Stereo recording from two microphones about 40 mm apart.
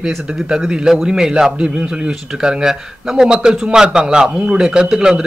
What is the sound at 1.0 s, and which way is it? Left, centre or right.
A man's voice, centre.